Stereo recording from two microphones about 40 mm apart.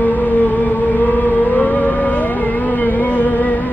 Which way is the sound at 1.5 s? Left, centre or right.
Left.